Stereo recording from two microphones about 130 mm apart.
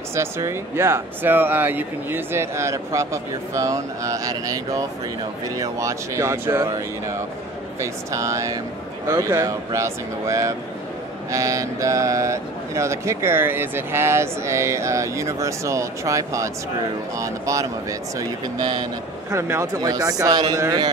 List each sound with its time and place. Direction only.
0.1 s speech: 20° right (ahead or behind)
7.8 s speech: 25° right (ahead or behind)
19.3 s speech: 25° right (ahead or behind)